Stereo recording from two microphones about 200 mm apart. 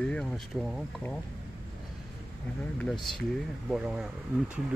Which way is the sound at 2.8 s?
Centre (ahead or behind).